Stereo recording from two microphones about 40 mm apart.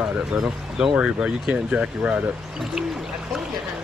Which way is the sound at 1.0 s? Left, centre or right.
Right.